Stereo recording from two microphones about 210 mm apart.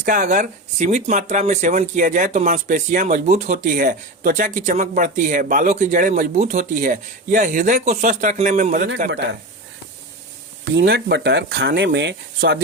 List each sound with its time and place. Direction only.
0.0 s speech: 40° right (ahead or behind)
9.0 s speech: 50° right (ahead or behind)
10.7 s speech: 55° right (ahead or behind)